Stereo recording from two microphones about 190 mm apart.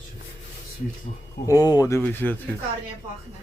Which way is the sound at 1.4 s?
20° left (ahead or behind).